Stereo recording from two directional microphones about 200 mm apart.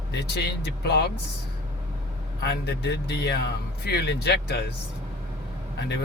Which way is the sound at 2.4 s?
55° left (ahead or behind).